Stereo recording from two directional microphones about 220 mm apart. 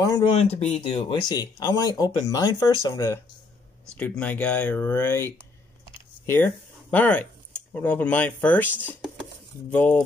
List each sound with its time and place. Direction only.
0.0 s speech: 20° left (ahead or behind)
8.8 s dishes: 5° left (ahead or behind)